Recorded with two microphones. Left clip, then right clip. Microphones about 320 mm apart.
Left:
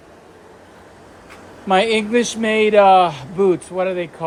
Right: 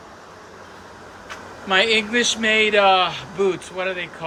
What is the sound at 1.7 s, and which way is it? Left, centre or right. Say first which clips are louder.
Speech: left 2 dB; centre.